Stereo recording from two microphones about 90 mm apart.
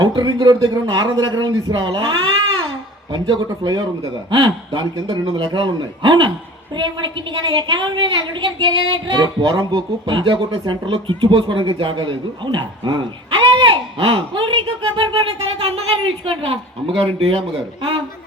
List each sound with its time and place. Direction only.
0.0 s a woman's voice: 60° right (ahead or behind); by 17.4 s 90° right